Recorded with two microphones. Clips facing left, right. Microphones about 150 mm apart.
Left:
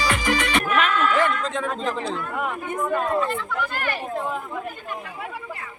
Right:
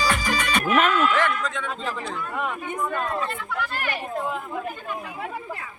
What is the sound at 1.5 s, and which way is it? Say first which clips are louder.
Speech: left 4 dB; 40° left (ahead or behind).